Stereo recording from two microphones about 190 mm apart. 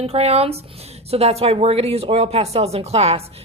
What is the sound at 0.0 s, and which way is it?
A woman's voice, 30° right (ahead or behind).